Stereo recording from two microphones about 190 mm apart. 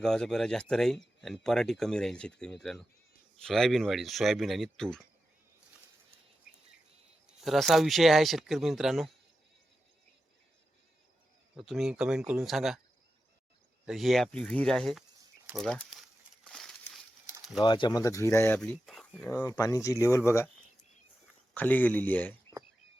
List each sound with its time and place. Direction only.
0.0 s speech: 5° left (ahead or behind)
7.4 s speech: centre (ahead or behind)
11.5 s speech: centre (ahead or behind)
13.8 s speech: centre (ahead or behind)
15.5 s crumpling: 5° left (ahead or behind)
17.6 s speech: 25° left (ahead or behind); by 19.3 s 5° left (ahead or behind)
19.3 s speech: 15° left (ahead or behind)
21.5 s speech: 10° left (ahead or behind)